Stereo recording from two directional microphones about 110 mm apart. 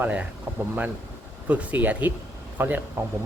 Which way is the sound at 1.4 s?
15° right (ahead or behind).